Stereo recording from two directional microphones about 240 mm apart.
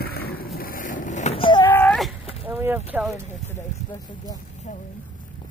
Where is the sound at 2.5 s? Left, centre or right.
Centre.